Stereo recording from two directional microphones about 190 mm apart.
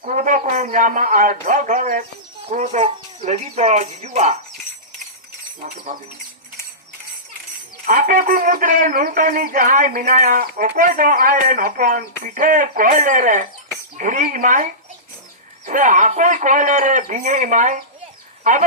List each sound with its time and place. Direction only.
0.0 s speech: 40° right (ahead or behind)
2.5 s speech: 35° right (ahead or behind)
5.6 s speech: 45° right (ahead or behind)
7.9 s speech: 45° right (ahead or behind)